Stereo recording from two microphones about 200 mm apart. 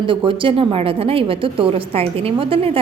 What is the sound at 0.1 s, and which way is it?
A woman's voice, 25° right (ahead or behind).